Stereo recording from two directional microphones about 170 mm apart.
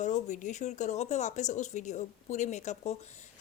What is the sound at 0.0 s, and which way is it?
A woman's voice, 45° left (ahead or behind).